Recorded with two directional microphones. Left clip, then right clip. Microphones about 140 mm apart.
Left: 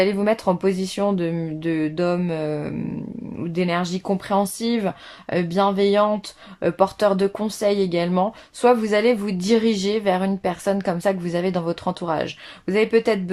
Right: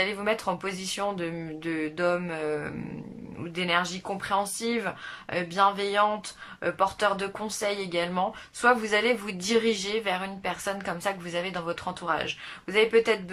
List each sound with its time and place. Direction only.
0.0 s speech: 35° left (ahead or behind)